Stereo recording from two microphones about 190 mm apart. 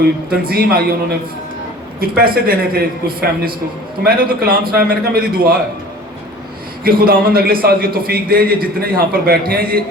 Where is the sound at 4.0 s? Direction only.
50° right (ahead or behind).